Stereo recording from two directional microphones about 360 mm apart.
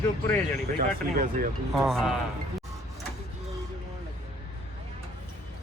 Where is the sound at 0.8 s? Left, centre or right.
Right.